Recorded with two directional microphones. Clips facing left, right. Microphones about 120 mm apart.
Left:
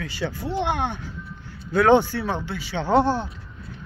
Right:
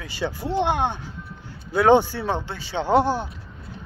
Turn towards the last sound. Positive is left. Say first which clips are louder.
# even
turn(degrees=-10)  # may be behind; listen again after turning